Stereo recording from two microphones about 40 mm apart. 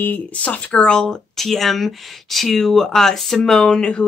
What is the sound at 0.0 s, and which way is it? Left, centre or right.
Speech, left.